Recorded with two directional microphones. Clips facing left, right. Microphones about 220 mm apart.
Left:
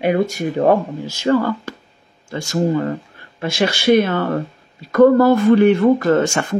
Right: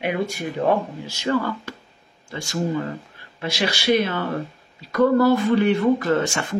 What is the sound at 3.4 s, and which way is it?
Speech, 50° left (ahead or behind).